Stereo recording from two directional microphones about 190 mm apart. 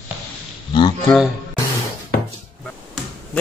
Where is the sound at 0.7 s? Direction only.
25° left (ahead or behind).